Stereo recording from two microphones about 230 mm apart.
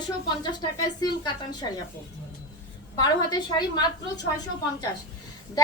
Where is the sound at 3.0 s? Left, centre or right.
Centre.